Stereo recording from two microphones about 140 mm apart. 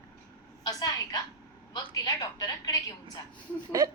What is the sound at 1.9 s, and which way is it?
Telephone, 25° left (ahead or behind).